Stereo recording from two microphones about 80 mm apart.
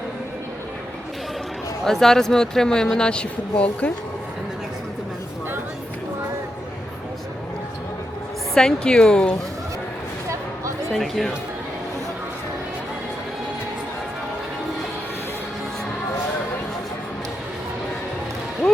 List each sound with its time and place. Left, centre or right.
1.8 s speech: centre
8.5 s speech: centre
10.9 s speech: centre